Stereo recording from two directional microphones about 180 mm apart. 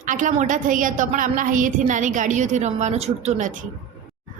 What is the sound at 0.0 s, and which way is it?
Speech, 45° right (ahead or behind).